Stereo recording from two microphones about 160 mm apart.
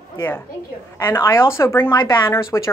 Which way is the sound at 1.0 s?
15° left (ahead or behind).